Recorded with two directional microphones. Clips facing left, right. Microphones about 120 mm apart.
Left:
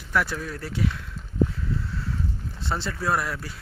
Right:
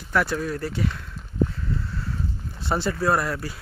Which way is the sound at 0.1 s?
Centre (ahead or behind).